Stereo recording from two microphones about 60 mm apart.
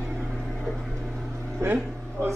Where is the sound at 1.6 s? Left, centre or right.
Right.